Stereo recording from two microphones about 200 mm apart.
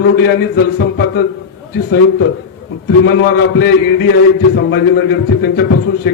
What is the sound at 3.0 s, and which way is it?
A man's voice, 55° left (ahead or behind).